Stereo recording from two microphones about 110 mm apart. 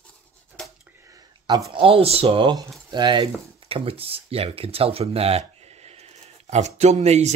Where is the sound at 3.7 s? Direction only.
60° right (ahead or behind).